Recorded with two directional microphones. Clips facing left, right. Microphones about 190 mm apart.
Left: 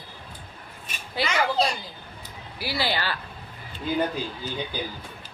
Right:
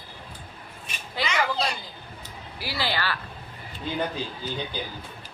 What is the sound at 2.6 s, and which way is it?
Speech, 15° left (ahead or behind).